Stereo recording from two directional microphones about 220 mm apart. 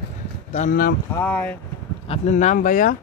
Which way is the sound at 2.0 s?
30° left (ahead or behind).